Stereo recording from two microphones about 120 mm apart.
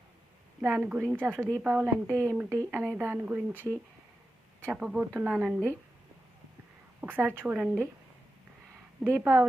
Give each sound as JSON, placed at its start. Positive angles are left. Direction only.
{"t": 0.6, "sound": "speech", "side_deg": -15}
{"t": 7.0, "sound": "speech", "side_deg": -15}
{"t": 9.1, "sound": "speech", "side_deg": -15}